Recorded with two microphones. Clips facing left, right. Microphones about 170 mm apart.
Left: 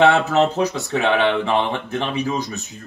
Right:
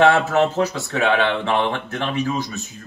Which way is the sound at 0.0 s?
20° left (ahead or behind).